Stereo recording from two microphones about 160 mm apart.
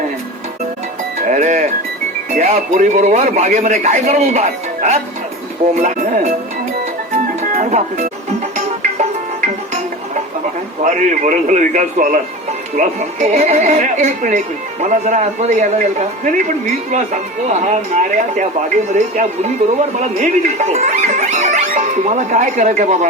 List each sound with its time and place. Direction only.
1.2 s music: 50° right (ahead or behind)
2.3 s speech: 50° right (ahead or behind)
7.5 s speech: 50° right (ahead or behind)
10.8 s speech: 55° right (ahead or behind)